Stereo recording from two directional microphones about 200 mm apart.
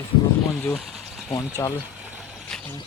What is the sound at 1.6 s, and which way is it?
Speech, 15° left (ahead or behind).